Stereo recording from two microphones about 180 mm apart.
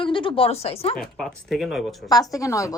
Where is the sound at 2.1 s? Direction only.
20° left (ahead or behind).